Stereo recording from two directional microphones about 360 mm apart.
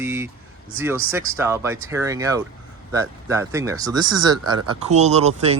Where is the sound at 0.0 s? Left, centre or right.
Centre.